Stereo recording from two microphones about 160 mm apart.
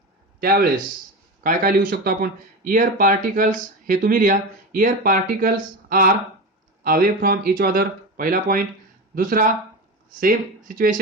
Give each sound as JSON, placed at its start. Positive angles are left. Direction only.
{"t": 0.3, "sound": "a man's voice", "side_deg": -70}